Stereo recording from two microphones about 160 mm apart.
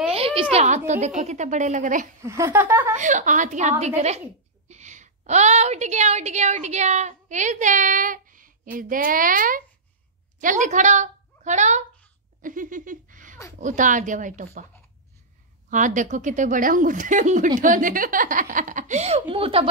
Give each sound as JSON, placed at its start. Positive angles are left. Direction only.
{"t": 0.1, "sound": "speech", "side_deg": -35}
{"t": 2.2, "sound": "speech", "side_deg": -15}
{"t": 3.0, "sound": "a woman's voice", "side_deg": -50}
{"t": 12.4, "sound": "laughter", "side_deg": -55}
{"t": 13.6, "sound": "speech", "side_deg": -50}
{"t": 15.7, "sound": "speech", "side_deg": -50}